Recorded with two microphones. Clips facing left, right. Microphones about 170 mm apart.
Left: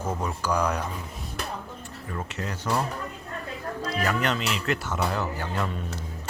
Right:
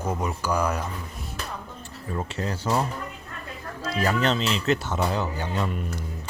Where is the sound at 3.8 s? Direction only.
30° right (ahead or behind).